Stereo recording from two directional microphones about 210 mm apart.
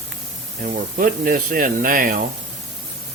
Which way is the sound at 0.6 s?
40° right (ahead or behind).